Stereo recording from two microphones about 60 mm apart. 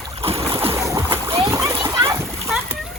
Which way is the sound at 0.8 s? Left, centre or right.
Right.